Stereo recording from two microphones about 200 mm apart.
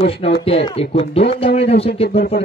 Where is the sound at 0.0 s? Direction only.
30° left (ahead or behind).